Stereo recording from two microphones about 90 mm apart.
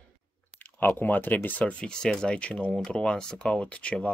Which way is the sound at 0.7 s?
20° left (ahead or behind).